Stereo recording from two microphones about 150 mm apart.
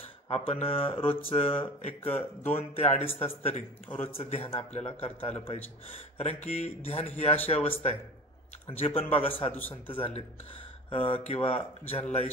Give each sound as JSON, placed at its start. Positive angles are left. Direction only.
{"t": 0.5, "sound": "speech", "side_deg": 40}
{"t": 3.9, "sound": "speech", "side_deg": 15}
{"t": 4.2, "sound": "speech", "side_deg": 45}
{"t": 9.5, "sound": "speech", "side_deg": 10}
{"t": 9.8, "sound": "speech", "side_deg": 40}